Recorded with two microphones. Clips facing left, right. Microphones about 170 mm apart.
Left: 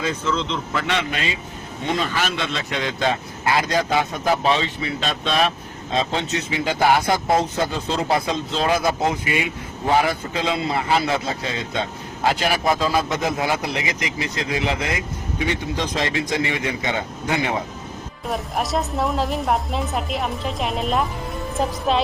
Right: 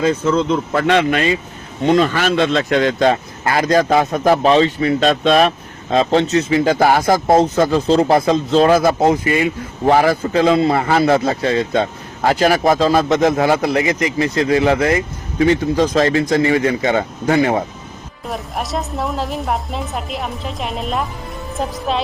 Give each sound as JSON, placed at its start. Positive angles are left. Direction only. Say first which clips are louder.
{"t": 0.0, "sound": "speech", "louder": "right 8 dB", "side_deg": -45}
{"t": 8.0, "sound": "speech", "louder": "right 8 dB", "side_deg": -50}
{"t": 9.8, "sound": "speech", "louder": "right 6 dB", "side_deg": -55}
{"t": 18.3, "sound": "a woman's voice", "louder": "even", "side_deg": 0}